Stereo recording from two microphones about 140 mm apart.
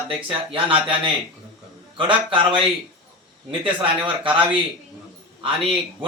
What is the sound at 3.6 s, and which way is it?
Speech, 35° right (ahead or behind).